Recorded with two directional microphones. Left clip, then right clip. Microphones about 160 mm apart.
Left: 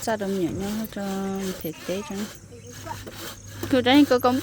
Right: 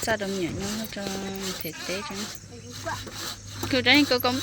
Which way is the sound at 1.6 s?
70° left (ahead or behind).